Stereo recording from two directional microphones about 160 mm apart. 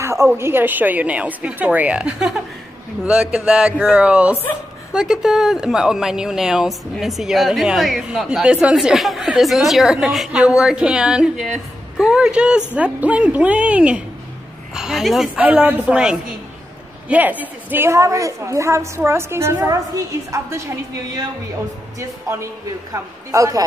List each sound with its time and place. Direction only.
0.0 s a woman's voice: 15° right (ahead or behind)